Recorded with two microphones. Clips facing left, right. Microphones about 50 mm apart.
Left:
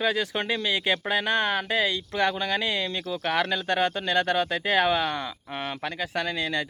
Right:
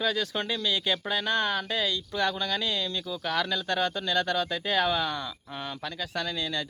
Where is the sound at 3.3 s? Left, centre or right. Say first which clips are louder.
Left 3 dB; left.